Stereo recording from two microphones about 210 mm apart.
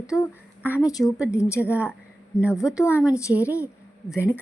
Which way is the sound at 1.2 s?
5° right (ahead or behind).